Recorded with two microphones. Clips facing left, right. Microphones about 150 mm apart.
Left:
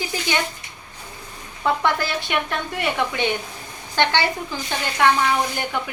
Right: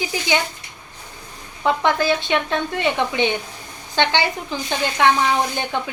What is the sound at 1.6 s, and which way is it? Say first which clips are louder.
Speech: right 2 dB; 20° right (ahead or behind).